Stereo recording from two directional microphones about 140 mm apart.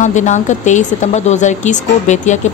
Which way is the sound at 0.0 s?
60° left (ahead or behind).